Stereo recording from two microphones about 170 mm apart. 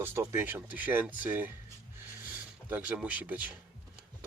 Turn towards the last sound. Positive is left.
turn(degrees=-10)  # may be behind; listen again after turning